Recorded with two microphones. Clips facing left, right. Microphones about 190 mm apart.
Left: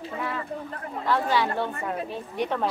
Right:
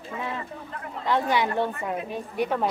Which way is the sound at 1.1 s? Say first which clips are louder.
Right 1 dB; 20° right (ahead or behind).